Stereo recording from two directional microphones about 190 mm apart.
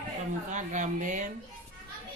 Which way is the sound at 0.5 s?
40° right (ahead or behind).